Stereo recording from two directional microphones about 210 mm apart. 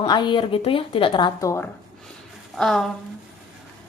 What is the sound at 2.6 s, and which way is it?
Speech, centre (ahead or behind).